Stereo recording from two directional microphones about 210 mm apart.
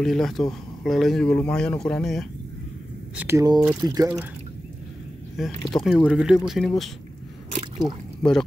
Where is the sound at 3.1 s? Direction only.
10° right (ahead or behind).